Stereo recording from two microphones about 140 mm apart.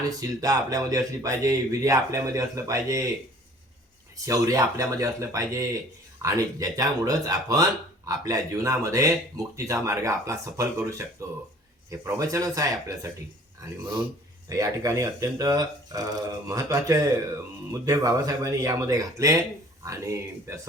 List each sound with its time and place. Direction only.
0.2 s speech: 25° right (ahead or behind)
4.3 s speech: 25° right (ahead or behind)
14.5 s speech: 25° right (ahead or behind)